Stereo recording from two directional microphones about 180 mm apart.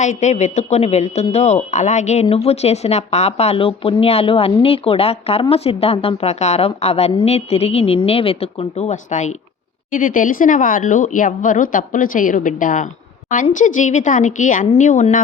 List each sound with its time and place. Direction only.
0.0 s speech: 40° left (ahead or behind)